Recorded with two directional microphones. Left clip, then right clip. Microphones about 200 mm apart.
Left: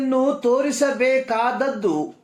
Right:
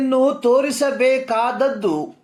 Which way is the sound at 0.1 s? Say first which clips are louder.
Right 3 dB; 30° right (ahead or behind).